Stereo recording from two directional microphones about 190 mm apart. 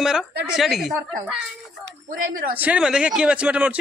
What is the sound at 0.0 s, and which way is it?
Speech, 5° right (ahead or behind).